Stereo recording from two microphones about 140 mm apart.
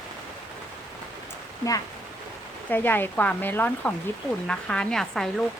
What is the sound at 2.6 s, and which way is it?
Speech, 15° left (ahead or behind).